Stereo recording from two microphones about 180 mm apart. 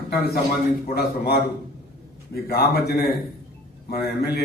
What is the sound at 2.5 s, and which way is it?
A man's voice, 60° left (ahead or behind).